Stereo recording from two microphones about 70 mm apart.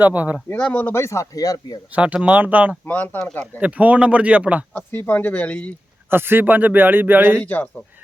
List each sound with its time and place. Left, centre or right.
0.0 s speech: right
0.5 s speech: left
0.9 s speech: left
2.2 s speech: right
2.8 s speech: left
3.6 s speech: right
4.7 s speech: left
6.1 s speech: right
7.3 s speech: left